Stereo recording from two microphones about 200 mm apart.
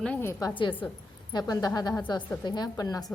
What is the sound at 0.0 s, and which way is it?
A woman's voice, 10° left (ahead or behind).